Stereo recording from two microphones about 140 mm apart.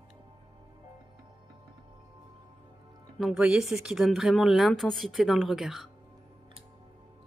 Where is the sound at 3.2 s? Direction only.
Centre (ahead or behind).